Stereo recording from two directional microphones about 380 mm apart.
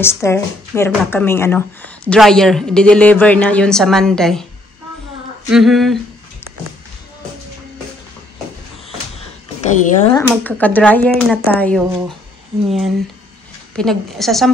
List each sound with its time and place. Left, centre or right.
0.0 s speech: centre
5.5 s speech: centre
9.6 s speech: centre
10.2 s speech: centre